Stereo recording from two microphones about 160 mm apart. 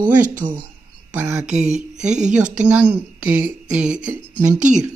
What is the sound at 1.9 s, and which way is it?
Speech, 50° right (ahead or behind).